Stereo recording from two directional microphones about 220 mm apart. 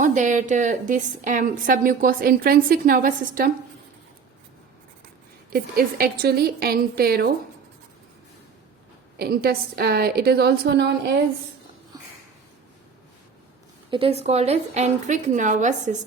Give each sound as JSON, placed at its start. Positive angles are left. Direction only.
{"t": 0.0, "sound": "a woman's voice", "side_deg": -35}
{"t": 5.5, "sound": "a woman's voice", "side_deg": -45}
{"t": 9.1, "sound": "a woman's voice", "side_deg": -45}
{"t": 13.9, "sound": "a woman's voice", "side_deg": -25}